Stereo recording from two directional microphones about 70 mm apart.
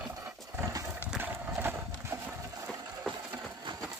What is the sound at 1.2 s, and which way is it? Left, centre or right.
Horse, right.